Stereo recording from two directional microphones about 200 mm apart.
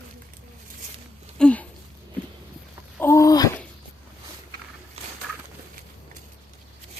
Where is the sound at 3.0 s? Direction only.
15° left (ahead or behind).